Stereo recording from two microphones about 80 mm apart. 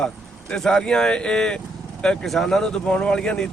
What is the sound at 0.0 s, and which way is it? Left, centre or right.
Speech, centre.